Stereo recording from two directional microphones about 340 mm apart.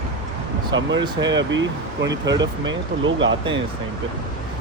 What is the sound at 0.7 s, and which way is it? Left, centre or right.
Speech, right.